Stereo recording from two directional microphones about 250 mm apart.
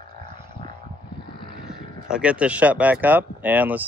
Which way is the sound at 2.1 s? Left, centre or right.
Centre.